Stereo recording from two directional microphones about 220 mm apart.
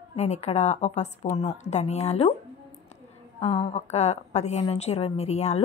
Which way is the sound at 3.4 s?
25° left (ahead or behind).